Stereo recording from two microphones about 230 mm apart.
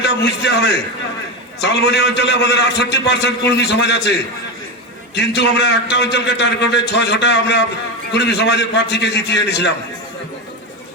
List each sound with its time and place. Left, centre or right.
0.0 s a man's voice: left
1.8 s a man's voice: left
5.1 s a man's voice: left